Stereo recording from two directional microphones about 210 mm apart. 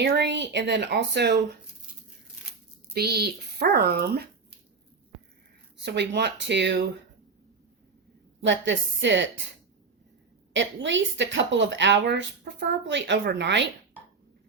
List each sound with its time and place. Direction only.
0.0 s a woman's voice: 55° right (ahead or behind)
2.9 s speech: 50° right (ahead or behind)
5.7 s a woman's voice: 55° right (ahead or behind)
8.4 s a woman's voice: 60° right (ahead or behind)
10.5 s a woman's voice: 60° right (ahead or behind)